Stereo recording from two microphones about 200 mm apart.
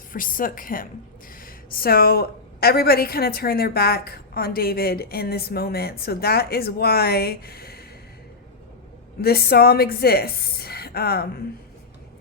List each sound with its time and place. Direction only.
0.1 s a woman's voice: 45° left (ahead or behind)
9.2 s a woman's voice: 50° left (ahead or behind)